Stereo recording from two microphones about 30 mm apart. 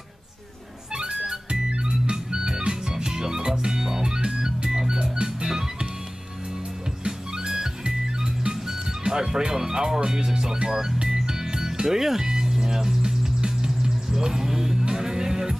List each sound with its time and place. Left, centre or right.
0.9 s music: right
7.1 s music: right
9.0 s music: right